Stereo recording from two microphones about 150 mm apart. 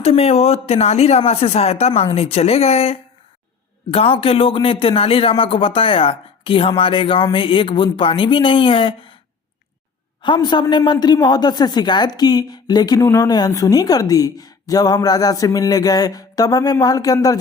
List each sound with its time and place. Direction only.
0.0 s speech: 45° left (ahead or behind)
10.2 s a woman's voice: 30° left (ahead or behind)